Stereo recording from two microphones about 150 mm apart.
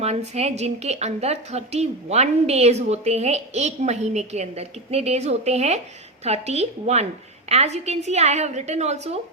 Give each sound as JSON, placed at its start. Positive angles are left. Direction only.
{"t": 0.0, "sound": "a woman's voice", "side_deg": -45}